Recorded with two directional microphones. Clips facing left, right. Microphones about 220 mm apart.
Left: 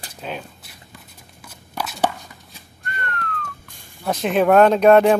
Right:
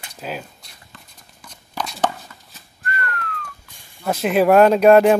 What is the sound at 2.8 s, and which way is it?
Whistling, 5° right (ahead or behind).